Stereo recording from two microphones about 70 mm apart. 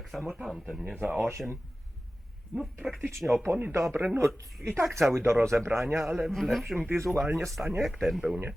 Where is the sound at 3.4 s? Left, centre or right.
Right.